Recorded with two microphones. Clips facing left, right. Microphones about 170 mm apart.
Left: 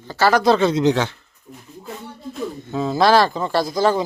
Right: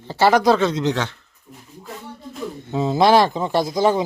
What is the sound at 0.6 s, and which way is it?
Speech, 5° left (ahead or behind).